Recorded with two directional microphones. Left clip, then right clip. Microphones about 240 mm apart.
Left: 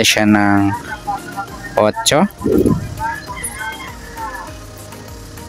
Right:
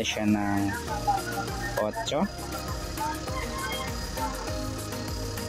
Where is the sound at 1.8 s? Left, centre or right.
Left.